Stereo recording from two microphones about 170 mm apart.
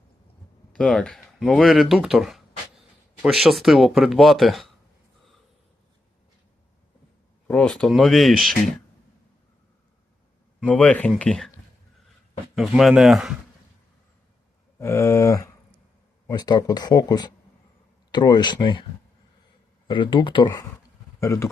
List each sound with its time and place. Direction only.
0.7 s speech: 5° left (ahead or behind)
7.4 s speech: 5° left (ahead or behind)
10.7 s a sound: 10° left (ahead or behind)
11.2 s speech: 5° left (ahead or behind)
12.5 s speech: centre (ahead or behind)
14.8 s a sound: 15° left (ahead or behind)
16.2 s speech: 25° left (ahead or behind)
19.9 s speech: 30° left (ahead or behind)
21.2 s a sound: 15° left (ahead or behind)